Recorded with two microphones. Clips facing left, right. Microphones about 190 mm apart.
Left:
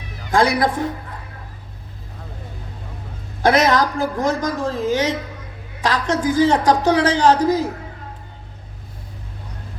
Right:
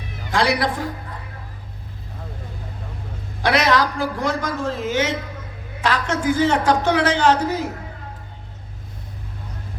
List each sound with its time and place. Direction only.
0.3 s a woman's voice: 50° left (ahead or behind)
3.4 s a woman's voice: 45° left (ahead or behind)